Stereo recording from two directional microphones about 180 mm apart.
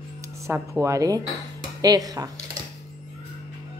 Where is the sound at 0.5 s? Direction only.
15° right (ahead or behind).